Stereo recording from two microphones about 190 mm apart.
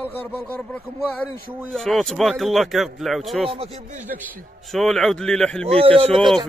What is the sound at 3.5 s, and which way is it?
Speech, 35° right (ahead or behind).